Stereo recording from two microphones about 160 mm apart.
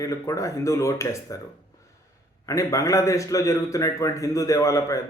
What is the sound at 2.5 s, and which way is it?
A man's voice, 20° left (ahead or behind).